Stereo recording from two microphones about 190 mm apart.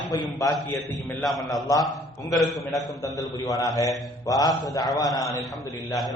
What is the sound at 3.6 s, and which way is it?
Speech, 20° left (ahead or behind).